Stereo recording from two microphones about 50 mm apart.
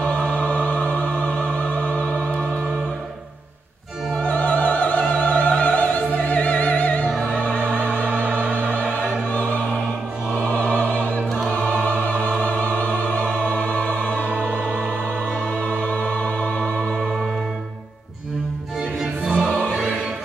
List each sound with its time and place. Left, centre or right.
0.0 s music: left
4.2 s opera: left
7.2 s music: left
8.1 s music: right
8.6 s music: left
10.5 s opera: left
11.4 s choir: left
12.3 s music: left
14.3 s music: right
15.6 s music: left